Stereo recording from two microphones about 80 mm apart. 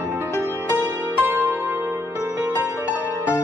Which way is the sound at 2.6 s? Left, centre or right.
Right.